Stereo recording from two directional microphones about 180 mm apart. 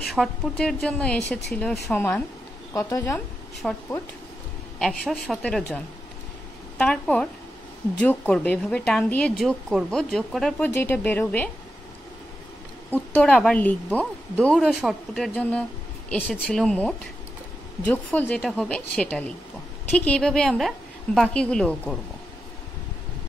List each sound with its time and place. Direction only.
0.1 s a woman's voice: centre (ahead or behind)
3.6 s speech: 5° left (ahead or behind)
6.8 s speech: 5° left (ahead or behind)
12.9 s a woman's voice: 5° left (ahead or behind)